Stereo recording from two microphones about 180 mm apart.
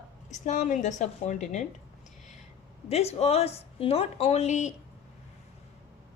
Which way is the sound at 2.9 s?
35° left (ahead or behind).